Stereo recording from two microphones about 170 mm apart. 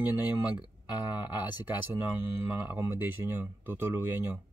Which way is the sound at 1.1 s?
10° right (ahead or behind).